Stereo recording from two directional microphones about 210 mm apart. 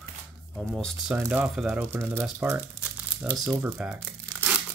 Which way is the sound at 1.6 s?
10° right (ahead or behind).